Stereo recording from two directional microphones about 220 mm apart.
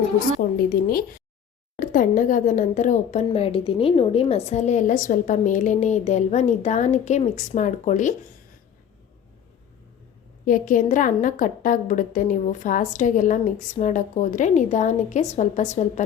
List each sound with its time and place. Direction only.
1.7 s speech: 40° left (ahead or behind)
10.4 s speech: 35° left (ahead or behind)